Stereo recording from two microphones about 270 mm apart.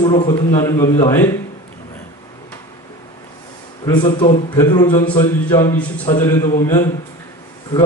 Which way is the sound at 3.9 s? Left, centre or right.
Centre.